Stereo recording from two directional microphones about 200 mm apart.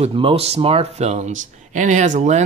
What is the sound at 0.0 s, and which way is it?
Speech, 25° right (ahead or behind).